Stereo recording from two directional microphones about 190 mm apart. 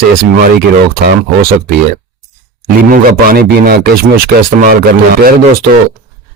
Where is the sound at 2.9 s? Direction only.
50° right (ahead or behind).